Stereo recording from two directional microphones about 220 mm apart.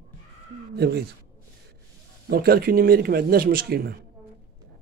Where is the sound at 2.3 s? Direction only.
45° right (ahead or behind).